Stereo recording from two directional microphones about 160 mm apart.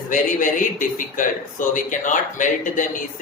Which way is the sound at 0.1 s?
55° left (ahead or behind).